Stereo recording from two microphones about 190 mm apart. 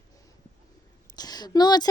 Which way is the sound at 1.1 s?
20° left (ahead or behind).